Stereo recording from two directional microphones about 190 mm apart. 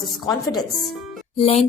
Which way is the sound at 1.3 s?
35° left (ahead or behind).